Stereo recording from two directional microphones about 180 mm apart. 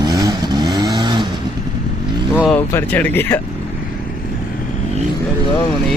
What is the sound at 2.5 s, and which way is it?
Speech, 10° left (ahead or behind).